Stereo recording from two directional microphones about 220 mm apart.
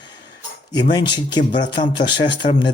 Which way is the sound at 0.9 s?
20° left (ahead or behind).